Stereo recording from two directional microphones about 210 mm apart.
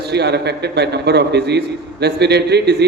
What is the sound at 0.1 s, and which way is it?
A man's voice, 55° right (ahead or behind).